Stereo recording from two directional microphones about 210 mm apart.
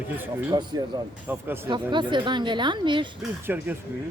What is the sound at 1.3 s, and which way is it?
Speech, 10° right (ahead or behind).